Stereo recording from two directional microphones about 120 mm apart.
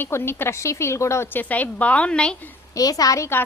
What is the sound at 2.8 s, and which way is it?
Speech, 30° left (ahead or behind).